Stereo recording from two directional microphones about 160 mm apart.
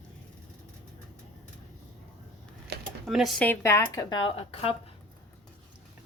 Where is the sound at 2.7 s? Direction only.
90° right.